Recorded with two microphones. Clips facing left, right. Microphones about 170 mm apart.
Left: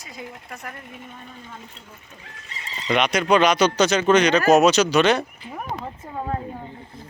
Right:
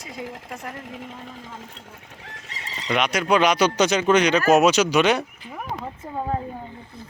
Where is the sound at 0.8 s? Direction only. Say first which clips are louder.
Right 4 dB; 90° right.